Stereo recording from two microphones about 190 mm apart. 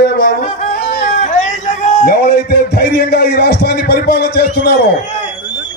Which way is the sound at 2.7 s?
60° left (ahead or behind).